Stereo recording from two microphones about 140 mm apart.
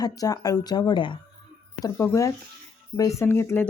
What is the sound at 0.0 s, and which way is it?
Speech, 25° left (ahead or behind).